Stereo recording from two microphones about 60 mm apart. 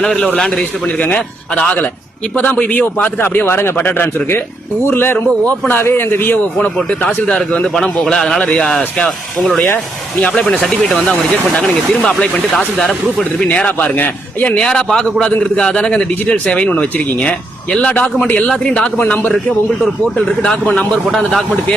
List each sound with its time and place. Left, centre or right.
0.0 s a man's voice: centre
0.9 s a man's voice: left
3.2 s a man's voice: left
7.3 s a man's voice: centre
7.7 s a man's voice: centre
10.2 s speech: centre
12.0 s speech: centre; by 14.6 s left
14.6 s a man's voice: centre
18.9 s a man's voice: left
19.8 s a man's voice: centre